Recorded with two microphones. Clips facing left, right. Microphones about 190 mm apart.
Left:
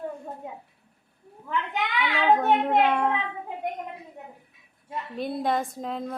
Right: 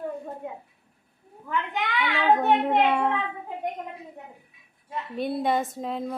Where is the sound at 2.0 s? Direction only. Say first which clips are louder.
Even; centre (ahead or behind).